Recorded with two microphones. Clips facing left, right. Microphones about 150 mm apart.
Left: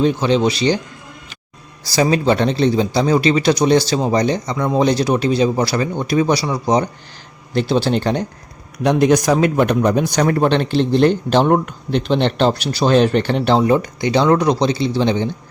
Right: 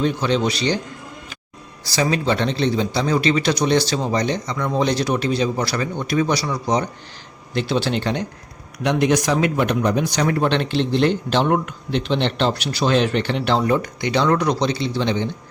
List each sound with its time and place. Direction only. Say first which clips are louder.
0.0 s speech: left 4 dB; 30° left (ahead or behind)
1.9 s speech: left 5 dB; 35° left (ahead or behind)